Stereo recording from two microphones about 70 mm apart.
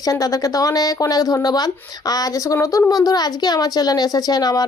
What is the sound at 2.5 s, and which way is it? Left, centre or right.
A woman's voice, left.